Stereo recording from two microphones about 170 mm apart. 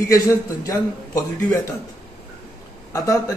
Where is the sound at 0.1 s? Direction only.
20° left (ahead or behind).